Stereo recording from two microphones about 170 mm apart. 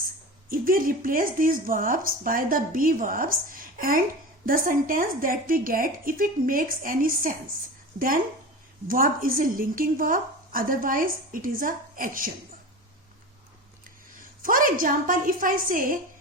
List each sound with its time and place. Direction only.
0.5 s speech: 55° right (ahead or behind)
13.8 s a woman's voice: 55° right (ahead or behind)